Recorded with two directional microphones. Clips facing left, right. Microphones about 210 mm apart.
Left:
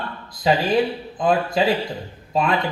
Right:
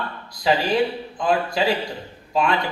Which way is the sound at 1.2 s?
20° left (ahead or behind).